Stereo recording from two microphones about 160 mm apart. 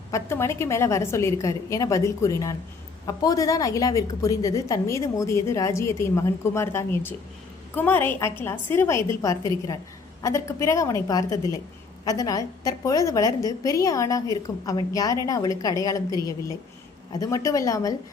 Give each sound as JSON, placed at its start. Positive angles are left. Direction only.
{"t": 0.1, "sound": "a woman's voice", "side_deg": 15}
{"t": 17.1, "sound": "a woman's voice", "side_deg": 20}